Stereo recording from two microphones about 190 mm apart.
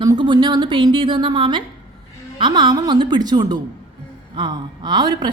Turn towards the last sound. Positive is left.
turn(degrees=-20)  # may be behind; listen again after turning